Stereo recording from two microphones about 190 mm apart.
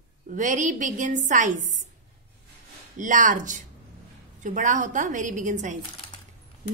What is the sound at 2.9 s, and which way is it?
A woman's voice, 45° right (ahead or behind).